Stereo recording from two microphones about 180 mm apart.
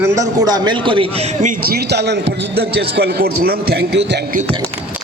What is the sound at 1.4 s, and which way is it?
Speech, 50° right (ahead or behind).